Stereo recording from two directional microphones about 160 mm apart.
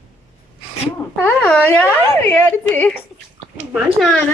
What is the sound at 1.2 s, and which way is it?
A woman's voice, 10° left (ahead or behind).